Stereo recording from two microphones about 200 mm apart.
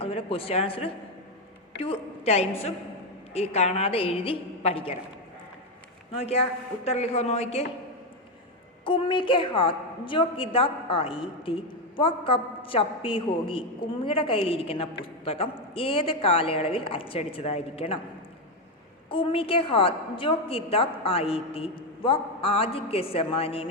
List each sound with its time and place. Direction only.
0.0 s a woman's voice: 30° left (ahead or behind)
6.1 s a woman's voice: 30° left (ahead or behind)
8.8 s a woman's voice: 25° left (ahead or behind)
19.0 s a woman's voice: 25° left (ahead or behind)